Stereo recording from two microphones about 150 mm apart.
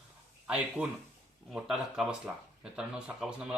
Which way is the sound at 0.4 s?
5° right (ahead or behind).